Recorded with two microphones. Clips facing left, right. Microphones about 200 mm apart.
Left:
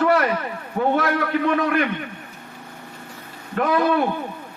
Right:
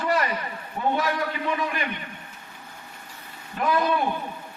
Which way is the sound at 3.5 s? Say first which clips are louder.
Left 4 dB; 65° left (ahead or behind).